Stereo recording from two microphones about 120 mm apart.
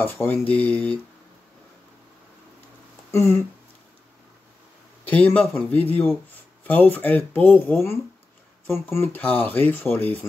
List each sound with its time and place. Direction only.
0.0 s speech: 15° left (ahead or behind)
3.1 s a sound: 20° left (ahead or behind)
5.0 s speech: 15° left (ahead or behind)